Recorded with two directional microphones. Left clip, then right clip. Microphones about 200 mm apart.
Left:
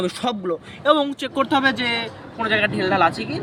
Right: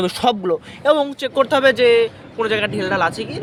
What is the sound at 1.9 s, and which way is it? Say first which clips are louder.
Speech: right 9 dB; 25° right (ahead or behind).